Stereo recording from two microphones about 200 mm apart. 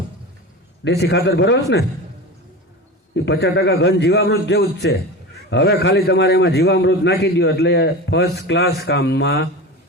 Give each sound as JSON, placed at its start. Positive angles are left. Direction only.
{"t": 0.9, "sound": "a man's voice", "side_deg": 55}
{"t": 3.2, "sound": "a man's voice", "side_deg": 55}